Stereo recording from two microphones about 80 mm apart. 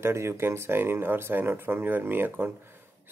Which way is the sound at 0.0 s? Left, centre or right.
Right.